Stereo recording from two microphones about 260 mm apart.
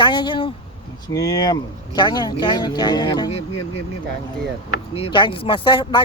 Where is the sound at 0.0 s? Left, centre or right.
Centre.